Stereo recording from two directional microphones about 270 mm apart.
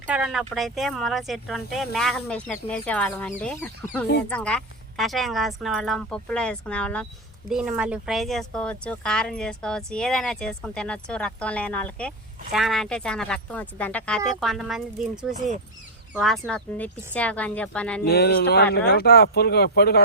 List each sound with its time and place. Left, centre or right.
0.1 s speech: centre
18.0 s speech: left